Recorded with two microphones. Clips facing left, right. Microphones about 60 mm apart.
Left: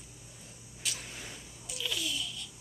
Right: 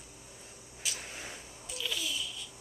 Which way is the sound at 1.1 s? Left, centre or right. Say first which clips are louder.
Right 2 dB; right.